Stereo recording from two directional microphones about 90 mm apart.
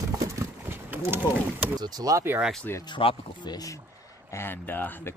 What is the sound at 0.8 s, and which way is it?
Speech, 20° right (ahead or behind).